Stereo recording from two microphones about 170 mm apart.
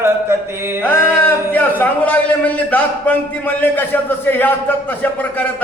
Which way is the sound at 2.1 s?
10° left (ahead or behind).